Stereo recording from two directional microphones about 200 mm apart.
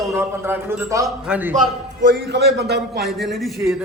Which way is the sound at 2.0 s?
60° right (ahead or behind).